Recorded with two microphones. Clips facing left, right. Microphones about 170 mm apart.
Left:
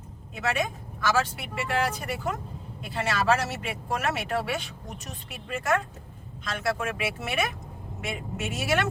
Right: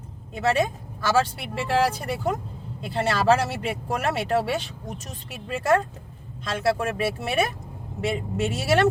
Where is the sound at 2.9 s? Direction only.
35° right (ahead or behind).